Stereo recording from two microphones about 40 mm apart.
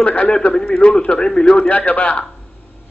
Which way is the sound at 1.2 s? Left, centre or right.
Centre.